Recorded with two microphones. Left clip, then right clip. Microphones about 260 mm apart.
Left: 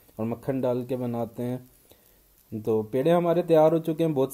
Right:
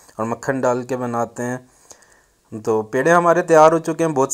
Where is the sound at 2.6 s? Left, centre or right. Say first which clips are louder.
Right 6 dB; right.